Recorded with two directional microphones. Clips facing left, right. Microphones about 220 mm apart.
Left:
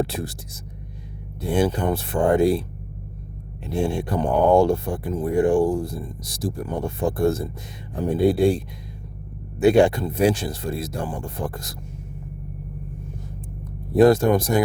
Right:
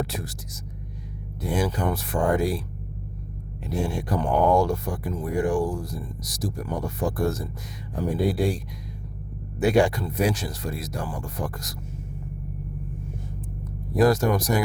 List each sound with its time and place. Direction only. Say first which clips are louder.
0.0 s speech: left 5 dB; 30° left (ahead or behind)
3.8 s speech: left 4 dB; 25° left (ahead or behind)
13.9 s speech: left 5 dB; 25° left (ahead or behind)